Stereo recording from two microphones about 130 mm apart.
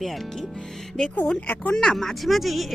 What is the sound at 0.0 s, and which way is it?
Speech, centre (ahead or behind).